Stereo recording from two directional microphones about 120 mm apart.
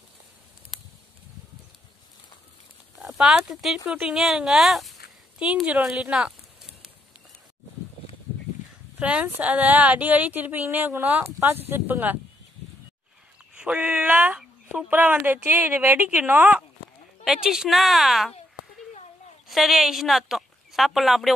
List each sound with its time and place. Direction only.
3.0 s speech: centre (ahead or behind)
9.0 s speech: 10° right (ahead or behind)
13.6 s speech: 10° right (ahead or behind)
19.4 s speech: centre (ahead or behind)